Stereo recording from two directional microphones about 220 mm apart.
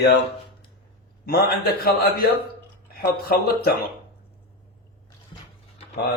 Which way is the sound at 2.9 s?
45° left (ahead or behind).